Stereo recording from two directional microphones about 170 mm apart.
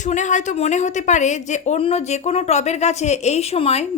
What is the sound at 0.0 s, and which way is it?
A woman's voice, 45° left (ahead or behind).